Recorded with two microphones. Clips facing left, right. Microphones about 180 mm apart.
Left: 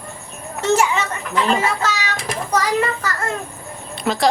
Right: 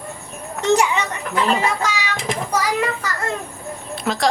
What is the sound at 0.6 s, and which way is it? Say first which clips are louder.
Children playing: even; 15° right (ahead or behind).